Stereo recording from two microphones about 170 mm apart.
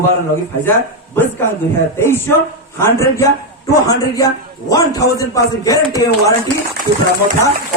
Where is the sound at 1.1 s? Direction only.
10° left (ahead or behind).